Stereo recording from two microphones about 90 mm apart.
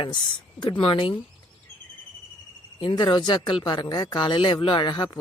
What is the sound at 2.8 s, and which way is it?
Speech, 55° left (ahead or behind).